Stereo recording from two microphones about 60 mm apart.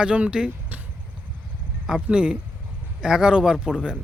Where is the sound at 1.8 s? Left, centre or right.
Centre.